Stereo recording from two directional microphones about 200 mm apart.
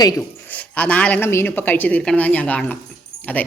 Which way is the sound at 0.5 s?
5° left (ahead or behind).